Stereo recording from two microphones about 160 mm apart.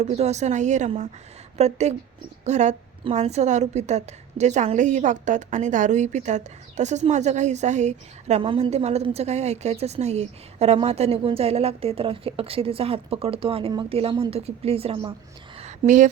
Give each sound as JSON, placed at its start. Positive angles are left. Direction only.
{"t": 0.0, "sound": "a woman's voice", "side_deg": -45}
{"t": 8.4, "sound": "a woman's voice", "side_deg": -30}